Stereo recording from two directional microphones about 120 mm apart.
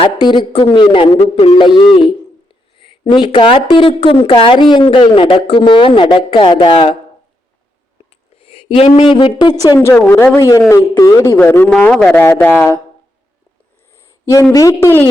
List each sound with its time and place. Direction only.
0.0 s speech: 45° left (ahead or behind)
1.2 s a man's voice: 60° left (ahead or behind)
1.5 s a sound: 40° left (ahead or behind)
3.2 s speech: 50° left (ahead or behind)
8.4 s a sound: 50° left (ahead or behind)
9.0 s speech: 50° left (ahead or behind); by 10.5 s 20° left (ahead or behind)
10.7 s a man's voice: 30° left (ahead or behind)
14.5 s speech: 25° left (ahead or behind)